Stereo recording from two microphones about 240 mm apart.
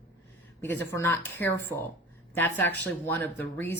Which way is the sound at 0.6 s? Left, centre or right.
Centre.